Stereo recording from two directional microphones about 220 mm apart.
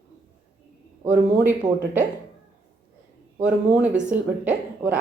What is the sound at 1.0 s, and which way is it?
Speech, 10° right (ahead or behind).